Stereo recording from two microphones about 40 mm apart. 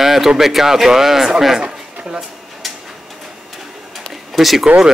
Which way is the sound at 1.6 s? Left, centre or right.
Centre.